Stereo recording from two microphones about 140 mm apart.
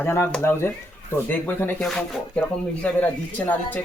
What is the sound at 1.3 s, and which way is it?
Speech, 15° left (ahead or behind).